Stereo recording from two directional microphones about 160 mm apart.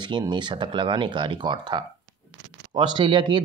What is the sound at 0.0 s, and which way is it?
Speech, 30° right (ahead or behind).